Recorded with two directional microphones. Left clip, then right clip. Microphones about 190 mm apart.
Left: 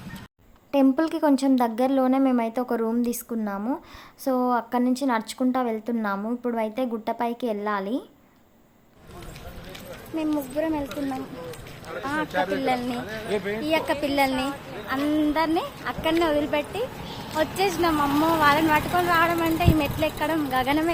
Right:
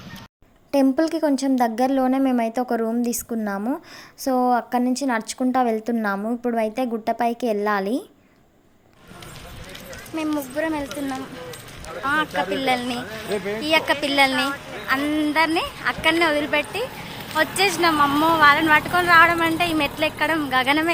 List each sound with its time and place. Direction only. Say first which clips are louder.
0.9 s a woman's voice: right 1 dB; centre (ahead or behind)
10.2 s a woman's voice: right 2 dB; 5° right (ahead or behind)
12.0 s a woman's voice: right 4 dB; 5° right (ahead or behind)
13.3 s speech: right 2 dB; 50° right (ahead or behind)
13.6 s a woman's voice: right 6 dB; 5° right (ahead or behind)
17.9 s a woman's voice: right 4 dB; 25° right (ahead or behind)
18.3 s a woman's voice: right 6 dB; 5° right (ahead or behind)